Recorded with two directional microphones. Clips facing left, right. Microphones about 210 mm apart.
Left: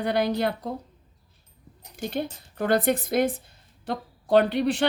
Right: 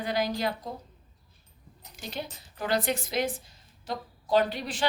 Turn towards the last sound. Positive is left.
turn(degrees=60)  # may be behind; listen again after turning